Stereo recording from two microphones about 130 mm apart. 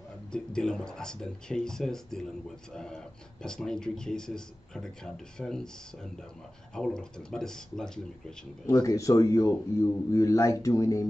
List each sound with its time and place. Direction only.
0.3 s speech: 5° left (ahead or behind)
6.7 s speech: 5° left (ahead or behind)
8.6 s speech: 25° left (ahead or behind)